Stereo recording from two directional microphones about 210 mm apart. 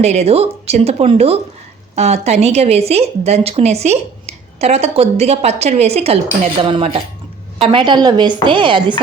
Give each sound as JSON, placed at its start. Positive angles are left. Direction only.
{"t": 0.0, "sound": "a woman's voice", "side_deg": -30}